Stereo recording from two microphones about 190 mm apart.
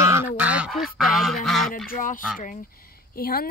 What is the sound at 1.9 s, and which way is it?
Speech, 45° left (ahead or behind).